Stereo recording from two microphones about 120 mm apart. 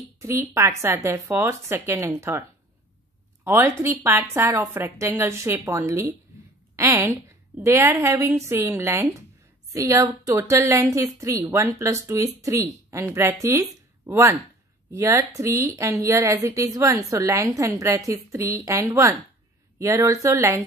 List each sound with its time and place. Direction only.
0.2 s a woman's voice: 25° right (ahead or behind)
3.4 s a woman's voice: 25° right (ahead or behind)